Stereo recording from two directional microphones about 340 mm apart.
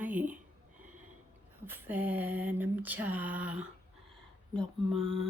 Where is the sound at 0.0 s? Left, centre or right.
Centre.